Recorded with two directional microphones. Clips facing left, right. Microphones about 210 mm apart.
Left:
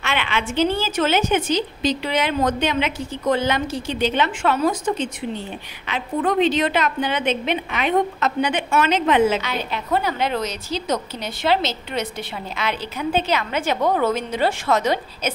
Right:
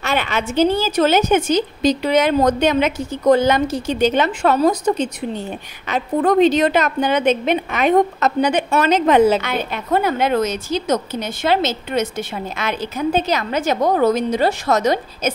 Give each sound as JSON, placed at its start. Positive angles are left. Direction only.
{"t": 0.0, "sound": "a woman's voice", "side_deg": -40}
{"t": 9.4, "sound": "a woman's voice", "side_deg": -50}